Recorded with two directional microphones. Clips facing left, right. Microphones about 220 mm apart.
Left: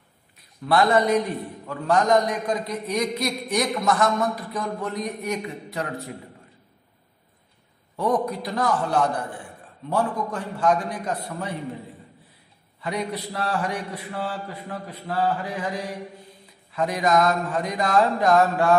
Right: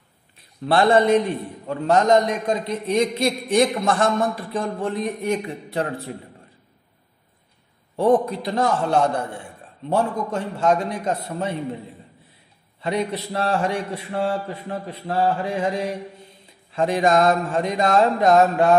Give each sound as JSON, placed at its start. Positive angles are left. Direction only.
{"t": 0.7, "sound": "a man's voice", "side_deg": -30}
{"t": 7.9, "sound": "a man's voice", "side_deg": -30}
{"t": 12.8, "sound": "a man's voice", "side_deg": -25}